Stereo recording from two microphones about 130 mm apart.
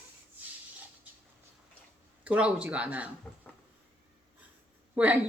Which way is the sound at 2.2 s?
10° right (ahead or behind).